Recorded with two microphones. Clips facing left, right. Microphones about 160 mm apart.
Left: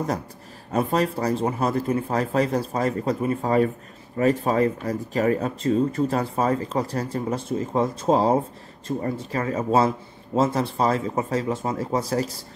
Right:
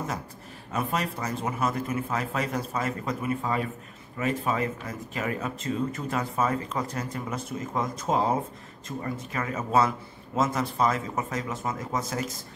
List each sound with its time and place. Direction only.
0.7 s speech: 35° left (ahead or behind)